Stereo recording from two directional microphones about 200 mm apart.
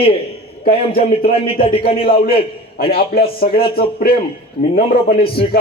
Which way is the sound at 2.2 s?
50° left (ahead or behind).